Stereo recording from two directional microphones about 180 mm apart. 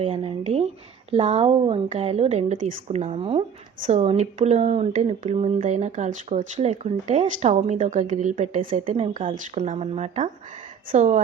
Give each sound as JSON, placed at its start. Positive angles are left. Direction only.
{"t": 0.0, "sound": "speech", "side_deg": -30}